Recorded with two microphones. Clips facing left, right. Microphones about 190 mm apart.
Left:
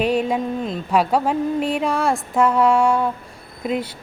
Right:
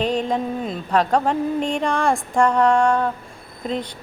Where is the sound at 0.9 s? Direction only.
10° left (ahead or behind).